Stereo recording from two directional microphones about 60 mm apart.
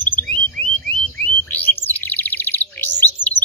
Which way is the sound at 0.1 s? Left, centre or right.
Left.